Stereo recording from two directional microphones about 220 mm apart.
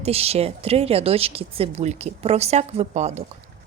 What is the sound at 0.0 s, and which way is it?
A woman's voice, 25° right (ahead or behind).